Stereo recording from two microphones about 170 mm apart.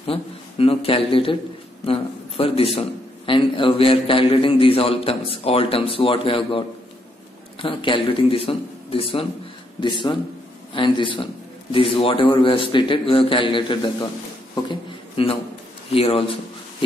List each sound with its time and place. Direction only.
0.0 s a man's voice: 35° left (ahead or behind)
7.6 s a man's voice: 30° left (ahead or behind)
14.5 s a sound: 30° left (ahead or behind)
15.9 s a man's voice: 35° left (ahead or behind)